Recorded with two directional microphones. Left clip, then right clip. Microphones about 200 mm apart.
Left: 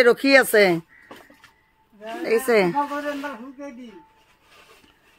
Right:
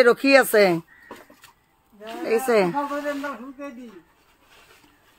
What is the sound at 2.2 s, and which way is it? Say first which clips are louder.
Speech: left 1 dB; 10° left (ahead or behind).